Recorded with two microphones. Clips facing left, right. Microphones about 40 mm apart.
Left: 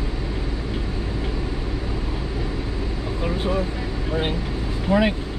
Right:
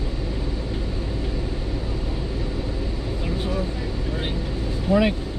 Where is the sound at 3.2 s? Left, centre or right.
Left.